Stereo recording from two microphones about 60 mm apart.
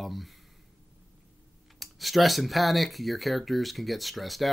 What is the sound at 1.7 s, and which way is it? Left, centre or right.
Speech, centre.